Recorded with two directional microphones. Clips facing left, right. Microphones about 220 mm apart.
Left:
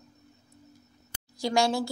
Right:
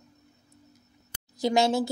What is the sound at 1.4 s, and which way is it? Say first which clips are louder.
Speech: right 2 dB; 20° right (ahead or behind).